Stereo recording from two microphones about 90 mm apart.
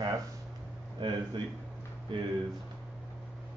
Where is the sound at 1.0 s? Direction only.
65° right (ahead or behind).